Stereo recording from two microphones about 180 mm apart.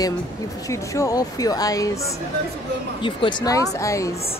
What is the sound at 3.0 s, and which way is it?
Speech, 25° left (ahead or behind).